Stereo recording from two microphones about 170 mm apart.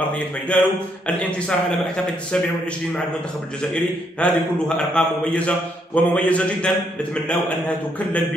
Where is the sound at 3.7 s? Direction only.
5° left (ahead or behind).